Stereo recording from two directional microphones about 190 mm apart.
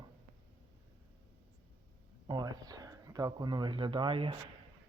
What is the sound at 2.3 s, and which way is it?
Speech, 20° right (ahead or behind).